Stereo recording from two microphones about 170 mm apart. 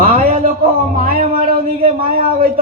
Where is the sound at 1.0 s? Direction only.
60° right (ahead or behind).